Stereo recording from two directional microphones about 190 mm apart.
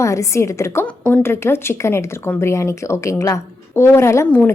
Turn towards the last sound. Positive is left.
turn(degrees=10)  # may be behind; listen again after turning